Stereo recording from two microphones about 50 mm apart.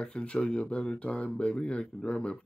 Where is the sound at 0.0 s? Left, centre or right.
Left.